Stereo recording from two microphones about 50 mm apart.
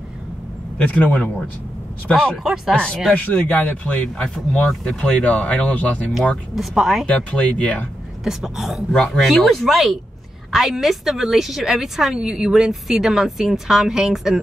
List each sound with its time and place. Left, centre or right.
0.7 s speech: left
2.3 s a woman's voice: centre
2.7 s speech: left
4.2 s speech: centre
6.5 s a woman's voice: centre
7.2 s speech: left
8.2 s a woman's voice: centre
8.9 s speech: centre
9.2 s a woman's voice: centre